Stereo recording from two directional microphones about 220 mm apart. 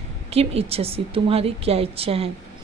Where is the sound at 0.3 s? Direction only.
25° right (ahead or behind).